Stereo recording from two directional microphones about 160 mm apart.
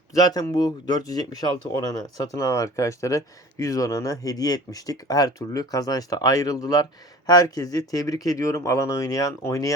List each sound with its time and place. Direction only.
0.1 s speech: 25° left (ahead or behind)